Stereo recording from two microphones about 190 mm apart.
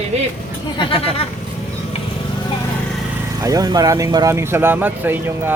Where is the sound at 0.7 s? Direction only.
30° left (ahead or behind).